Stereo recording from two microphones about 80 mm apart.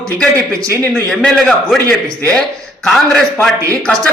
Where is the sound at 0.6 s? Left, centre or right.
Right.